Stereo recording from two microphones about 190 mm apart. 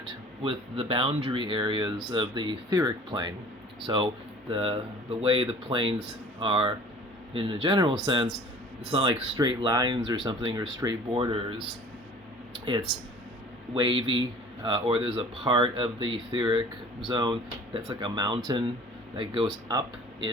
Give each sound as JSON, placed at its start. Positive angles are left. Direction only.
{"t": 0.0, "sound": "speech", "side_deg": -25}
{"t": 12.5, "sound": "a sound", "side_deg": -25}
{"t": 13.7, "sound": "speech", "side_deg": -25}